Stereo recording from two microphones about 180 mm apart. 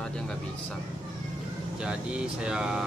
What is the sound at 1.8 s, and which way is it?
Speech, 5° right (ahead or behind).